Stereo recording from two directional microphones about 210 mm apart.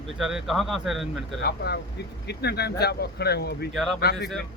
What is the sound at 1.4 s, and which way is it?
Speech, 50° left (ahead or behind).